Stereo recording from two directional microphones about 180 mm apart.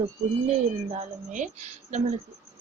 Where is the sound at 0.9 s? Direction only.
40° right (ahead or behind).